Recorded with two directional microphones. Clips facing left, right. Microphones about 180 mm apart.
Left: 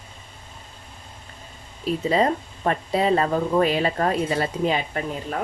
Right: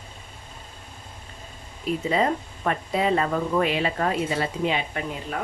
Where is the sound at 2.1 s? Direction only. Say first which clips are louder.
Left 3 dB; 35° left (ahead or behind).